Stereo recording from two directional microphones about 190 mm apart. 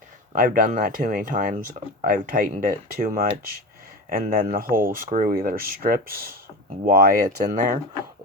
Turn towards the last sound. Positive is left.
turn(degrees=-45)  # may be behind; listen again after turning